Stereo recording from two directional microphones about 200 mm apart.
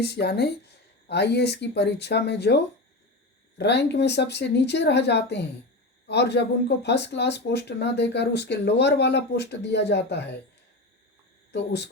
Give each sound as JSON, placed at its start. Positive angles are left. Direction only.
{"t": 0.0, "sound": "speech", "side_deg": 55}
{"t": 11.5, "sound": "speech", "side_deg": 55}